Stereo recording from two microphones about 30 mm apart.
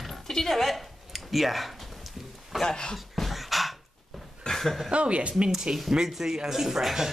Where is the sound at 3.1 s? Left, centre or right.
Centre.